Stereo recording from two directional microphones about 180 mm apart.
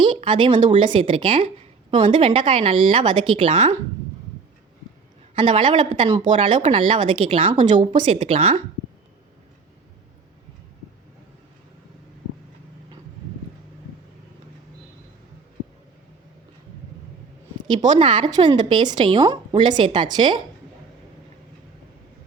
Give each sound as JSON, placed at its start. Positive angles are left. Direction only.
{"t": 0.0, "sound": "a woman's voice", "side_deg": -30}
{"t": 5.3, "sound": "a woman's voice", "side_deg": -30}
{"t": 7.5, "sound": "a woman's voice", "side_deg": -45}
{"t": 7.9, "sound": "speech", "side_deg": -30}
{"t": 17.6, "sound": "a sound", "side_deg": -25}
{"t": 17.9, "sound": "a woman's voice", "side_deg": -25}